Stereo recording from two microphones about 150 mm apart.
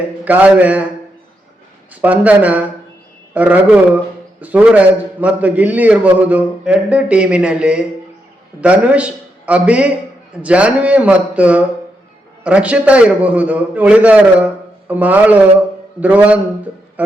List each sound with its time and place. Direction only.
0.3 s a man's voice: 10° right (ahead or behind)
1.9 s a man's voice: 10° right (ahead or behind)